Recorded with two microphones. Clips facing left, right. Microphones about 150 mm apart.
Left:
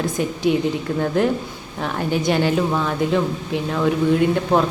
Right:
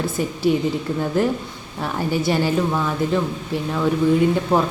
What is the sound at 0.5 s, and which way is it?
A woman's voice, 5° left (ahead or behind).